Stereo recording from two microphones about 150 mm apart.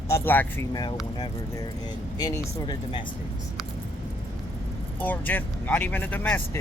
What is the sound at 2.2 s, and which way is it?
Speech, 30° left (ahead or behind).